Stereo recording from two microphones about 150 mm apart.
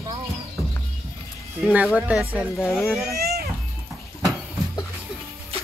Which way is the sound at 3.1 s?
90° right.